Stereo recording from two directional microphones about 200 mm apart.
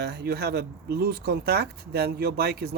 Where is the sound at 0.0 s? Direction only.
55° right (ahead or behind).